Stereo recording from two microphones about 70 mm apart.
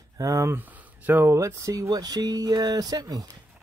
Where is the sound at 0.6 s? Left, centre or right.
Right.